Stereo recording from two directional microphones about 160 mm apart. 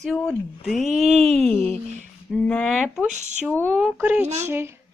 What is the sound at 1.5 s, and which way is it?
A woman's voice, 10° left (ahead or behind).